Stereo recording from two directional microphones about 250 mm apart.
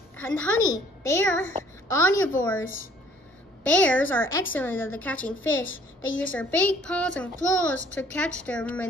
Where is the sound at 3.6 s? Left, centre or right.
Centre.